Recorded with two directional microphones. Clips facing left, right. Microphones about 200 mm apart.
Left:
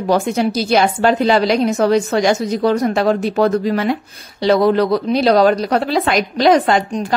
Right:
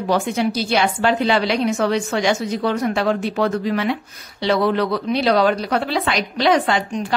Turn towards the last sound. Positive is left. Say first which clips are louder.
# left 4 dB
turn(degrees=40)  # may be behind; listen again after turning